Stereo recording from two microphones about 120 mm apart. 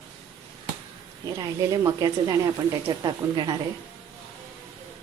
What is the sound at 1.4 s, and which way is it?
A woman's voice, 30° right (ahead or behind).